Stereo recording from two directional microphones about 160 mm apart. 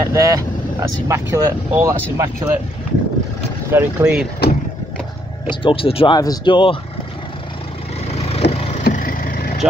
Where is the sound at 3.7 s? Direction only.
15° right (ahead or behind).